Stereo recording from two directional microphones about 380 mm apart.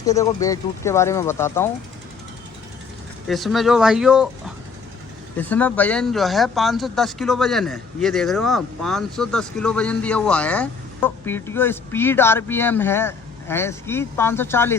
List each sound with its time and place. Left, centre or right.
0.0 s speech: centre
3.2 s speech: centre